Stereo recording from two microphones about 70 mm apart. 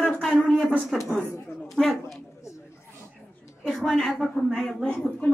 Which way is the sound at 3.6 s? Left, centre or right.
Centre.